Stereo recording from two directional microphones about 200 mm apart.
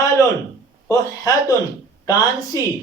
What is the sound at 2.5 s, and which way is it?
Speech, 15° left (ahead or behind).